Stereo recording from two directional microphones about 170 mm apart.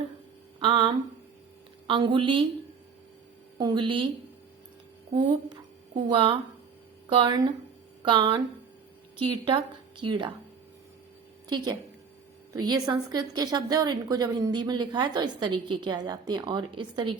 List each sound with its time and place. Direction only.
0.6 s a woman's voice: 30° right (ahead or behind)
3.6 s a woman's voice: 25° right (ahead or behind)
6.1 s a woman's voice: 30° right (ahead or behind)
11.4 s a woman's voice: 25° right (ahead or behind)